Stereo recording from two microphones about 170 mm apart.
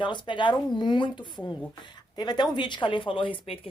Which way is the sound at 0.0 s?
30° left (ahead or behind).